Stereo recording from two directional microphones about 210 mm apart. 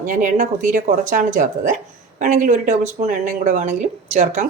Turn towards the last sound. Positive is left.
turn(degrees=-35)  # may be behind; listen again after turning